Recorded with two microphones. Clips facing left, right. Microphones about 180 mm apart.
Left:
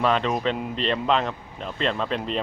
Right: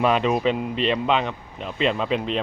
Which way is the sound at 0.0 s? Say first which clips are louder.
Right 3 dB; 10° right (ahead or behind).